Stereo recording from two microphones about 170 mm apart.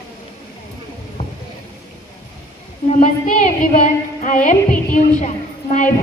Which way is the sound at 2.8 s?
45° left (ahead or behind).